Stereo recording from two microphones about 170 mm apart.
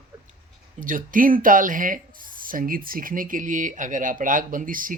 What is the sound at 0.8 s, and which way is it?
Speech, 50° right (ahead or behind).